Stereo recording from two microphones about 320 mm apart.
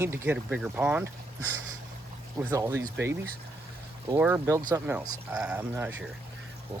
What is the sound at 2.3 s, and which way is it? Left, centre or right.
Speech, centre.